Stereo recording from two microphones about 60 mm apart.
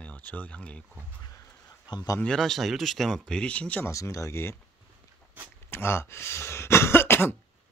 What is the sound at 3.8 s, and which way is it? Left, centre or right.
Speech, left.